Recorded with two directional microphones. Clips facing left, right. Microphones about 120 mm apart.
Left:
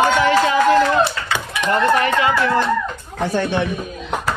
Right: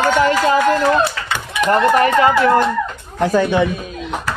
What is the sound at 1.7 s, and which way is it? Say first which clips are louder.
Speech: right 3 dB; 45° right (ahead or behind).